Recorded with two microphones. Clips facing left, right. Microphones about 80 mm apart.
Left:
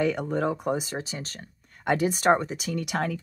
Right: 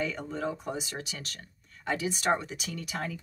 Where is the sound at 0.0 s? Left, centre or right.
Left.